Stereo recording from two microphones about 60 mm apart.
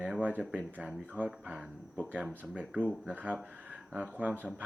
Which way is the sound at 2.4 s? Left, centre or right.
Right.